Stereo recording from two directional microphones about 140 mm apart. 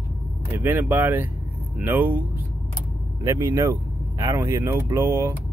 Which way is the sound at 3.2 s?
25° right (ahead or behind).